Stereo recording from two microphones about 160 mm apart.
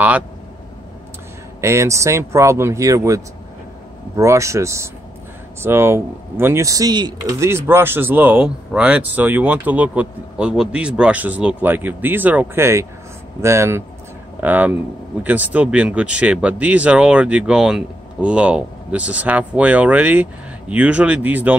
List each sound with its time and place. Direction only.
1.6 s speech: 20° right (ahead or behind)